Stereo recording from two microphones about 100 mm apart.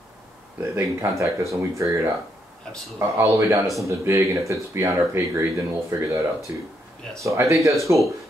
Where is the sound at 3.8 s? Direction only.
30° right (ahead or behind).